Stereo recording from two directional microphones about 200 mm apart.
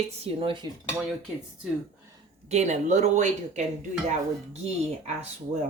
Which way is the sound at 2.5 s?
35° right (ahead or behind).